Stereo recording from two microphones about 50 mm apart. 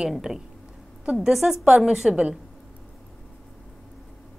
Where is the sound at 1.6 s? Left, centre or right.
Centre.